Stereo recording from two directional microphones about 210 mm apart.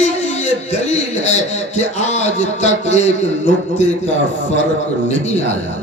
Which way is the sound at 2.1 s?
35° left (ahead or behind).